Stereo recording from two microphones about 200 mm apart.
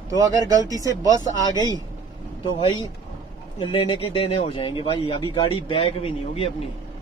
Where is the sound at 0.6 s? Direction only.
15° left (ahead or behind).